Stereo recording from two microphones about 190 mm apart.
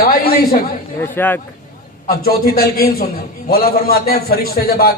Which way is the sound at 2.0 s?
55° left (ahead or behind).